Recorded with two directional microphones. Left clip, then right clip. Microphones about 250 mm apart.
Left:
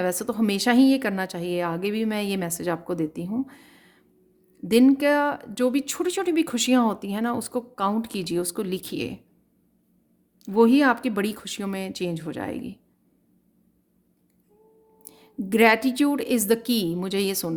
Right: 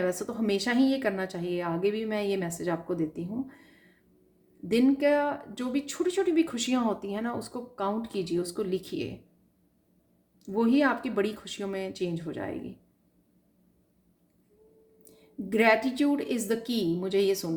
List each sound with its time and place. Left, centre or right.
0.0 s speech: left
10.4 s speech: left
15.0 s speech: left